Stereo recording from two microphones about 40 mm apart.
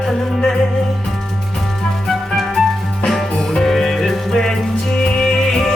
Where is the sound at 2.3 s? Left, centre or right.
Centre.